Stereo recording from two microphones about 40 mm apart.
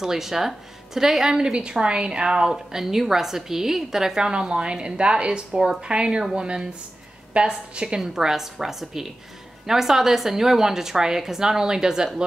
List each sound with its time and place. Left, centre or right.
0.0 s a woman's voice: centre
4.3 s a woman's voice: right
8.0 s a woman's voice: centre